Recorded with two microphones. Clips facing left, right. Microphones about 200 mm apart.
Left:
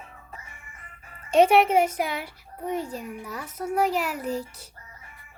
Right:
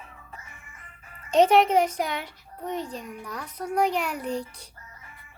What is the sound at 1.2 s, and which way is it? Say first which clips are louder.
A child's voice: left 1 dB; 10° left (ahead or behind).